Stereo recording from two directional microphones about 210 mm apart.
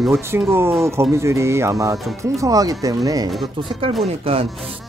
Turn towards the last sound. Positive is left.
turn(degrees=-25)  # may be behind; listen again after turning